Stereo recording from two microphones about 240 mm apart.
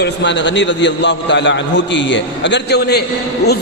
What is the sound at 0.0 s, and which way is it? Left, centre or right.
A man's voice, left.